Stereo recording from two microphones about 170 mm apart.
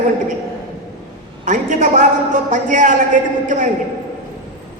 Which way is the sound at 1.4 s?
45° right (ahead or behind).